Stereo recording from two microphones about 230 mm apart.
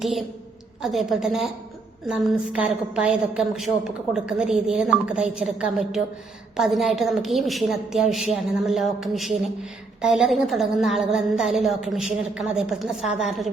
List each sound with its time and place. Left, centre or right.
0.0 s a woman's voice: centre